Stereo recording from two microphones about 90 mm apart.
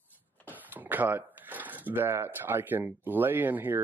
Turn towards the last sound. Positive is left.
turn(degrees=-20)  # may be behind; listen again after turning